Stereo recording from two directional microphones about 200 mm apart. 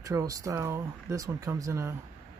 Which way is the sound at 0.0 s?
15° right (ahead or behind).